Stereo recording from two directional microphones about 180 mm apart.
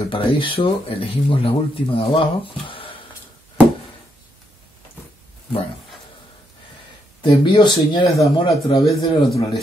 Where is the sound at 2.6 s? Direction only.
30° left (ahead or behind).